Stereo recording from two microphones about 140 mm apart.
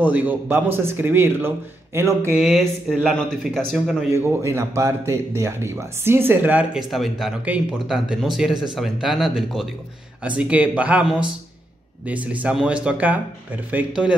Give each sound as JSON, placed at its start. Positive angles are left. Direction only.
{"t": 0.0, "sound": "speech", "side_deg": -10}
{"t": 2.3, "sound": "a man's voice", "side_deg": -5}
{"t": 4.2, "sound": "a man's voice", "side_deg": -15}